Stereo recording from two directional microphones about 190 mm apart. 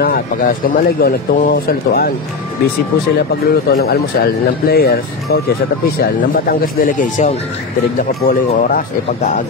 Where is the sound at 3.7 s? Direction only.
55° left (ahead or behind).